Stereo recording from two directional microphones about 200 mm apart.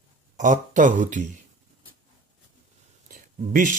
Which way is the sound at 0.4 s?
40° right (ahead or behind).